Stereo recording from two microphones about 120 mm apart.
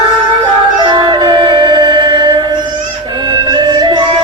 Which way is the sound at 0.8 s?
40° right (ahead or behind).